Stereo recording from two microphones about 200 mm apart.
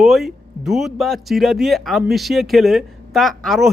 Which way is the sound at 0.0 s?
Centre (ahead or behind).